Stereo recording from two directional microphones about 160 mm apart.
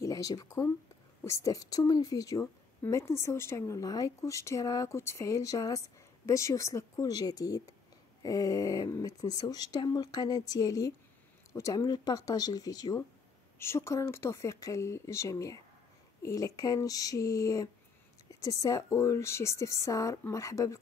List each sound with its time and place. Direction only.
0.0 s a woman's voice: 20° left (ahead or behind)